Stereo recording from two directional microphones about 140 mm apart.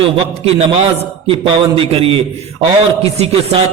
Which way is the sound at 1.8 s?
40° right (ahead or behind).